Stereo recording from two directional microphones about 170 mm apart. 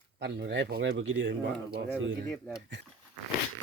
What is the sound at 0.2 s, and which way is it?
Speech, 90° right.